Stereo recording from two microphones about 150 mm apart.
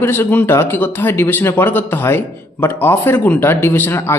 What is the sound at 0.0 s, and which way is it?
Speech, 15° left (ahead or behind).